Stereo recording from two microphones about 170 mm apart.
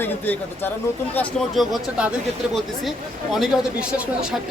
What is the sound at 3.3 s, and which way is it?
Speech, centre (ahead or behind).